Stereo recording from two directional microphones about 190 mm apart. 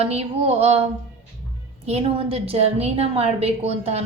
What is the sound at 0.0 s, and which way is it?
Speech, 35° right (ahead or behind).